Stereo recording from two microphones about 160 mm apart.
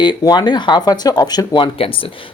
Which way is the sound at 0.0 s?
25° left (ahead or behind).